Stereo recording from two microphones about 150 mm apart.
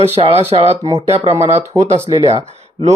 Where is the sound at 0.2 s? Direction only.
35° right (ahead or behind).